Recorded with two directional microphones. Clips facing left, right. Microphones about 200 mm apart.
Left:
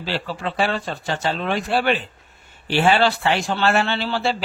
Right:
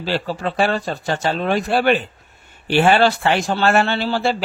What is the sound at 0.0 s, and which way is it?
A man's voice, 45° right (ahead or behind).